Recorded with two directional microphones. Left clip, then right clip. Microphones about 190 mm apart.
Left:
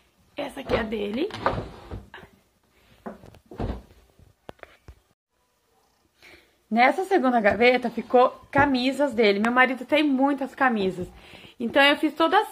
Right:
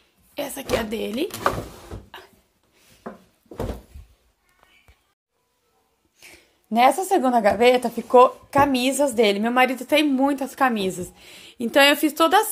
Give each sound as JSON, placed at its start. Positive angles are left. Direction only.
{"t": 0.3, "sound": "speech", "side_deg": -25}
{"t": 6.1, "sound": "a woman's voice", "side_deg": -15}